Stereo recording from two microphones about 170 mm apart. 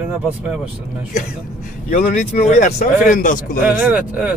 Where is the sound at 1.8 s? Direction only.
45° left (ahead or behind).